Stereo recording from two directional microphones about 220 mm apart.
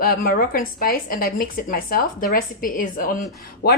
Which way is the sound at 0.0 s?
40° left (ahead or behind).